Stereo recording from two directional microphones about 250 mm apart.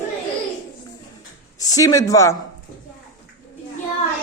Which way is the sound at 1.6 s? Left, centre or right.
Centre.